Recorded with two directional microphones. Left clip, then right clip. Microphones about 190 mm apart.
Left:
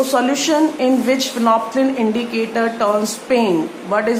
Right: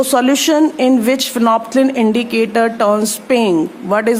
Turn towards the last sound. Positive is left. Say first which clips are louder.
# right 3 dB
turn(degrees=-50)  # may be behind; listen again after turning